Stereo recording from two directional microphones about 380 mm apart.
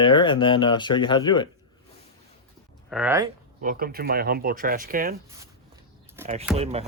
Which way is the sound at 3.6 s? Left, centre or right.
Right.